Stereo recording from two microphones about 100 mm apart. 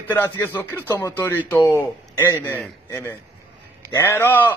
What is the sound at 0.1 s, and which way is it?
A man's voice, 20° left (ahead or behind).